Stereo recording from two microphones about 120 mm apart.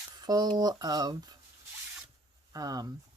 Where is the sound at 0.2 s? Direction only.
35° right (ahead or behind).